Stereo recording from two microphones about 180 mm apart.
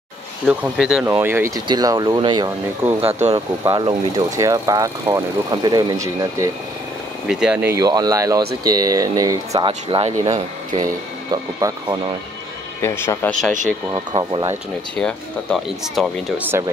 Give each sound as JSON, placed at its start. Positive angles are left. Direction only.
{"t": 0.5, "sound": "speech", "side_deg": -5}
{"t": 1.2, "sound": "speech", "side_deg": -15}
{"t": 3.0, "sound": "speech", "side_deg": -35}
{"t": 3.3, "sound": "speech", "side_deg": -25}
{"t": 7.2, "sound": "speech", "side_deg": -5}
{"t": 11.6, "sound": "speech", "side_deg": -15}
{"t": 12.8, "sound": "speech", "side_deg": 15}
{"t": 13.9, "sound": "speech", "side_deg": -25}
{"t": 15.0, "sound": "speech", "side_deg": 0}
{"t": 16.4, "sound": "speech", "side_deg": -15}